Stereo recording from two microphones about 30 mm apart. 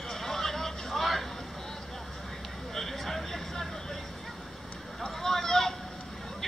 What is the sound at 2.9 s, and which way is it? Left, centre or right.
Vehicle, centre.